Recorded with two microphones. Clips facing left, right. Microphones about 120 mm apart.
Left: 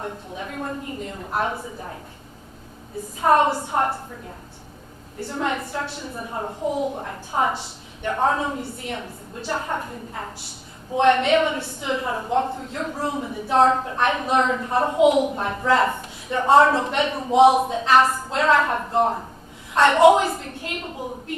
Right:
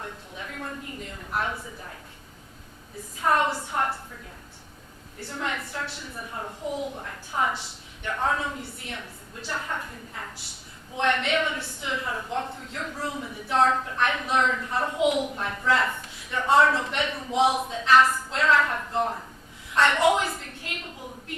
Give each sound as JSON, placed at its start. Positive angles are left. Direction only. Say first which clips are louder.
{"t": 0.0, "sound": "a woman's voice", "louder": "left 7 dB", "side_deg": 30}
{"t": 3.2, "sound": "a woman's voice", "louder": "left 6 dB", "side_deg": 35}
{"t": 5.3, "sound": "a woman's voice", "louder": "left 6 dB", "side_deg": 35}